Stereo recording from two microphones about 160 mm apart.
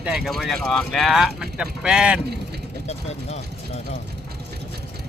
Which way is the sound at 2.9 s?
40° left (ahead or behind).